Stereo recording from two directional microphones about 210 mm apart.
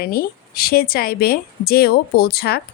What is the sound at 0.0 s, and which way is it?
A woman's voice, 45° left (ahead or behind).